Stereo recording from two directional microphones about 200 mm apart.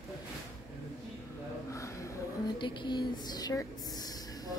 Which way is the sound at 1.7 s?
15° left (ahead or behind).